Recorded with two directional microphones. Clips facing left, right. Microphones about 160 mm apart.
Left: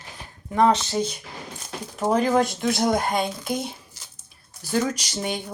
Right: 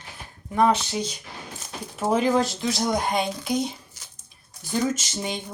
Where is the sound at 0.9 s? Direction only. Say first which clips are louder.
Left 4 dB; 50° left (ahead or behind).